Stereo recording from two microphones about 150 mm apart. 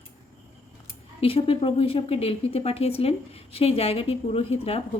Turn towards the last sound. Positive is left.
turn(degrees=40)  # may be behind; listen again after turning